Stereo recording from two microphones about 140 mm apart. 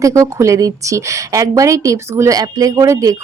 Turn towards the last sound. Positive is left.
turn(degrees=-25)  # may be behind; listen again after turning